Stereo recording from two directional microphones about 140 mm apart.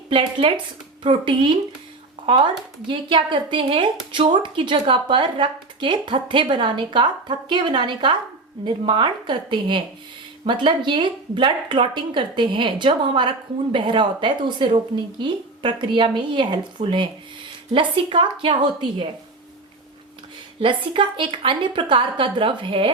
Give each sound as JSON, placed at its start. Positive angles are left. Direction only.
{"t": 0.1, "sound": "a woman's voice", "side_deg": -40}
{"t": 20.6, "sound": "a woman's voice", "side_deg": -35}